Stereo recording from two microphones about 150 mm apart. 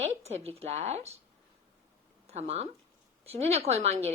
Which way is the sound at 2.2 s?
45° right (ahead or behind).